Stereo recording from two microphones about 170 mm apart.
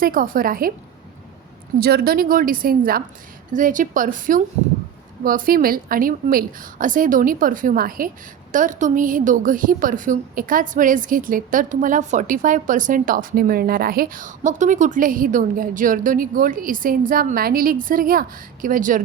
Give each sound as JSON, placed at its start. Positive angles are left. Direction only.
{"t": 0.0, "sound": "a woman's voice", "side_deg": -55}
{"t": 1.8, "sound": "a woman's voice", "side_deg": -65}